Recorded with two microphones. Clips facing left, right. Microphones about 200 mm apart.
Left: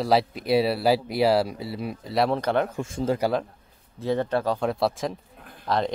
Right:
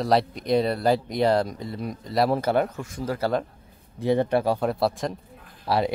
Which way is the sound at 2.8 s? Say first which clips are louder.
Left 4 dB; 25° left (ahead or behind).